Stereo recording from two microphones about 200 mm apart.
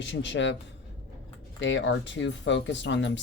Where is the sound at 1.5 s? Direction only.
65° left (ahead or behind).